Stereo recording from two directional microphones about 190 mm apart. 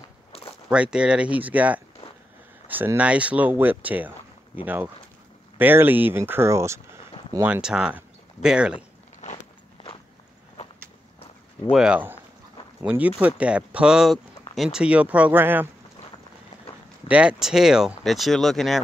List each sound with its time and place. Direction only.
0.7 s speech: 5° right (ahead or behind)
9.2 s biting: 40° left (ahead or behind)
11.7 s speech: 5° right (ahead or behind)
17.1 s speech: 5° right (ahead or behind)